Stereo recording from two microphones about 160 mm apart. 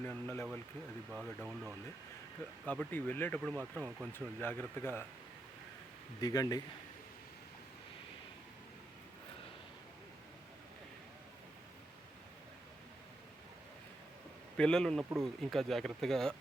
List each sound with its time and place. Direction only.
0.0 s speech: 10° left (ahead or behind)
1.1 s speech: 5° right (ahead or behind)
2.6 s speech: 10° left (ahead or behind)
3.5 s speech: 10° right (ahead or behind)
4.4 s speech: 15° left (ahead or behind)
6.1 s a man's voice: 25° left (ahead or behind)
14.5 s speech: 5° left (ahead or behind)